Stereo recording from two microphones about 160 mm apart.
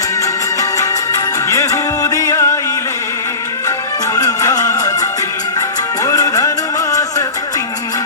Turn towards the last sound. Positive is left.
turn(degrees=25)  # may be behind; listen again after turning